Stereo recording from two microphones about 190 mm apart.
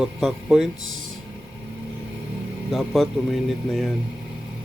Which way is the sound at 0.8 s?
90° right.